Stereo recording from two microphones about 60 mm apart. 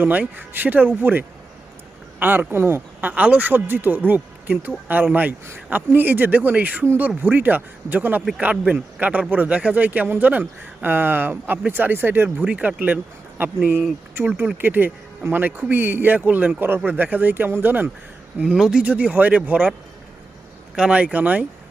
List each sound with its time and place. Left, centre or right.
0.0 s a man's voice: right
3.1 s speech: right
12.5 s speech: right
18.5 s speech: centre
18.8 s speech: right
20.7 s speech: centre